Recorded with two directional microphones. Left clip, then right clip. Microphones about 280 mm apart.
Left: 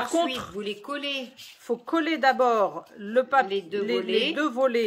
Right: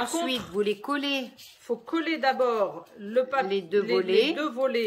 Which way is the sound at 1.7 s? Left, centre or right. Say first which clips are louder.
Left 3 dB; centre.